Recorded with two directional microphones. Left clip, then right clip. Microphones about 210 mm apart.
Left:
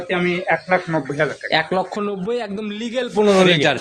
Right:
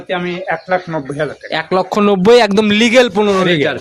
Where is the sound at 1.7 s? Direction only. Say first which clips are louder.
Right 9 dB; 50° right (ahead or behind).